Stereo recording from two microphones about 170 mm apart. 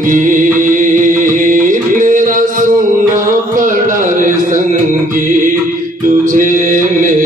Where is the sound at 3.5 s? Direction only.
50° right (ahead or behind).